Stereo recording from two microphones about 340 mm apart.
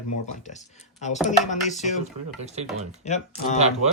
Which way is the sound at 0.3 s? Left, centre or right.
Left.